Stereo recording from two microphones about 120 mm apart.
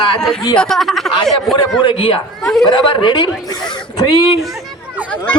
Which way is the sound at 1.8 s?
45° left (ahead or behind).